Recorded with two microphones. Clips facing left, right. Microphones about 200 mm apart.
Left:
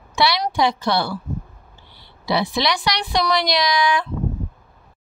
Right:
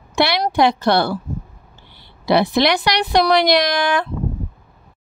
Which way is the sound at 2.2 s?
60° right (ahead or behind).